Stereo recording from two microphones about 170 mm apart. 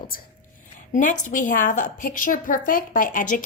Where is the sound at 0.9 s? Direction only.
50° left (ahead or behind).